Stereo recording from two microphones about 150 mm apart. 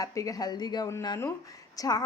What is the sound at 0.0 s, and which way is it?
A woman's voice, 20° left (ahead or behind).